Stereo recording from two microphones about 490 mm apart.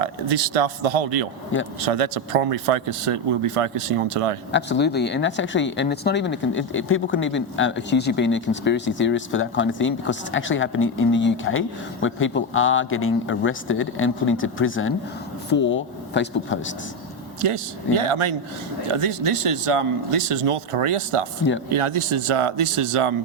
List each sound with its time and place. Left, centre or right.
0.3 s speech: right
4.5 s speech: left
17.4 s a man's voice: right
18.9 s a man's voice: right